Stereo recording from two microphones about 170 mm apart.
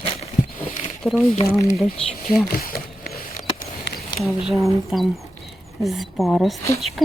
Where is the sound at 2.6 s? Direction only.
60° left (ahead or behind).